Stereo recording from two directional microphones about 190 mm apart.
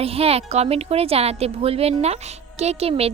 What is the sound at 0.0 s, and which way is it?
Speech, 30° right (ahead or behind).